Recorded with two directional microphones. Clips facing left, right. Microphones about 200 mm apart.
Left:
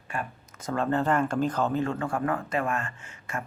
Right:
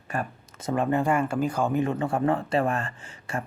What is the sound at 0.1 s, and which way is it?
Speech, 40° right (ahead or behind).